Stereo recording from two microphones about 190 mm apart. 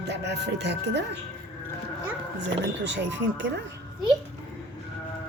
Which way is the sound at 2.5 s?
70° right (ahead or behind).